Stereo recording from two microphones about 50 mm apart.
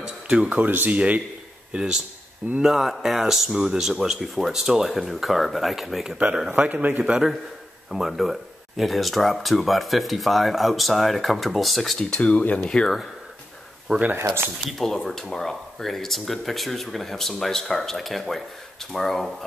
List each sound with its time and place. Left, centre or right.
0.0 s a sound: centre
0.8 s a man's voice: right
1.7 s speech: centre
6.1 s a man's voice: right
7.0 s a man's voice: centre
7.9 s speech: centre
12.2 s speech: left
13.9 s a man's voice: centre
14.7 s speech: centre